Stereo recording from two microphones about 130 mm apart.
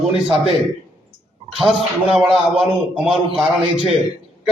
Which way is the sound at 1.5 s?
Centre (ahead or behind).